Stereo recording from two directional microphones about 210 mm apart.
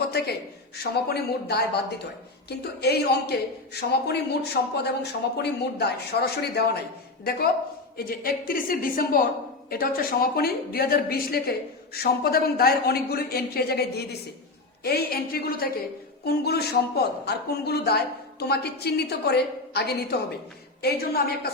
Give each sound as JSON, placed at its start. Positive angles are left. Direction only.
{"t": 0.1, "sound": "a sound", "side_deg": 50}
{"t": 0.8, "sound": "speech", "side_deg": 50}
{"t": 7.9, "sound": "speech", "side_deg": 45}